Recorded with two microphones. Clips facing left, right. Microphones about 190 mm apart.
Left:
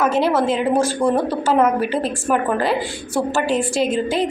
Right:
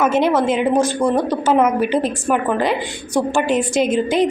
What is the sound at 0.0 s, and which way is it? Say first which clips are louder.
A woman's voice: right 2 dB; 20° right (ahead or behind).